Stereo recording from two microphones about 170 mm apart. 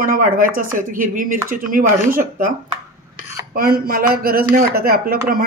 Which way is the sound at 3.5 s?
60° right (ahead or behind).